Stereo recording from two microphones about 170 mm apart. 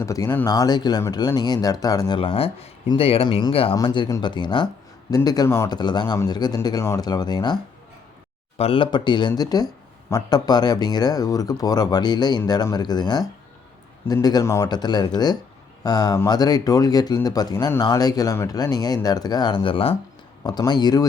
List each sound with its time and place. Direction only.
0.0 s speech: 20° left (ahead or behind)